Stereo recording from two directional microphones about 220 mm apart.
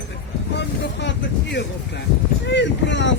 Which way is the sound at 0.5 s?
50° left (ahead or behind).